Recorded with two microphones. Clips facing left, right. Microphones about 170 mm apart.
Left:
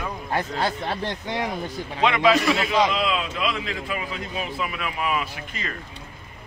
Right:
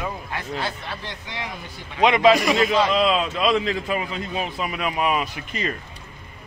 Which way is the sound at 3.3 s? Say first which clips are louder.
Right 6 dB; 35° right (ahead or behind).